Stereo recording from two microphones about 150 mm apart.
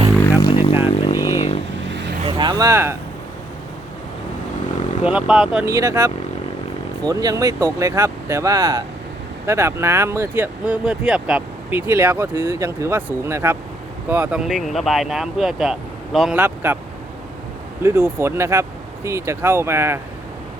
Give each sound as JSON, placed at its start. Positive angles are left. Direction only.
{"t": 0.5, "sound": "vehicle", "side_deg": 35}
{"t": 2.2, "sound": "a sound", "side_deg": -30}
{"t": 5.0, "sound": "speech", "side_deg": -5}
{"t": 5.6, "sound": "speech", "side_deg": -20}
{"t": 17.8, "sound": "speech", "side_deg": -15}